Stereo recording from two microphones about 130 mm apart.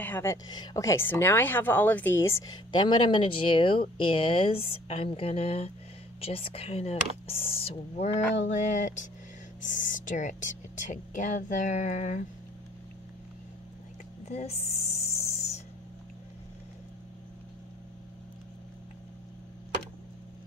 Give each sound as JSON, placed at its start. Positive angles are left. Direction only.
{"t": 0.0, "sound": "speech", "side_deg": 15}
{"t": 0.5, "sound": "a woman's voice", "side_deg": 30}
{"t": 9.6, "sound": "speech", "side_deg": 85}
{"t": 14.2, "sound": "a sound", "side_deg": 55}